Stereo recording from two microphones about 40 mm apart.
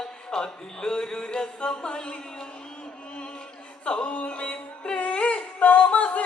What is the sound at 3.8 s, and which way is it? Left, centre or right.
Music, left.